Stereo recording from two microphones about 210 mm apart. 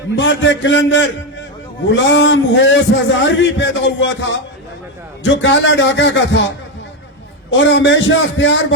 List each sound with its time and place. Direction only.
0.2 s a man's voice: 60° left (ahead or behind)
7.5 s a man's voice: 60° left (ahead or behind)